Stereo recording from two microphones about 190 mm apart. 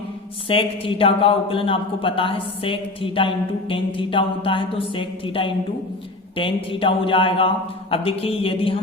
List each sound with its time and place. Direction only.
0.4 s a man's voice: 30° left (ahead or behind)